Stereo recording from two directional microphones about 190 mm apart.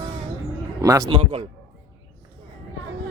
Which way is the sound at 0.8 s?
15° right (ahead or behind).